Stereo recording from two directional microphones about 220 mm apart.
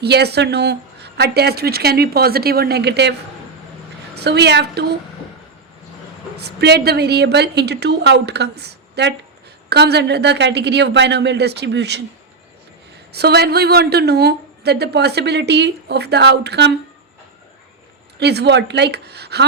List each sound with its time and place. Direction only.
0.0 s a woman's voice: 50° right (ahead or behind)
6.3 s a woman's voice: 50° right (ahead or behind)
13.1 s a woman's voice: 45° right (ahead or behind)
18.2 s a woman's voice: 50° right (ahead or behind)